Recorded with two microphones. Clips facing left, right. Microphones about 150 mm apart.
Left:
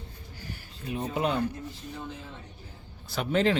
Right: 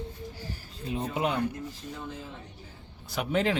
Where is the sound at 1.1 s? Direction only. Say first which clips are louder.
Left 1 dB; 15° right (ahead or behind).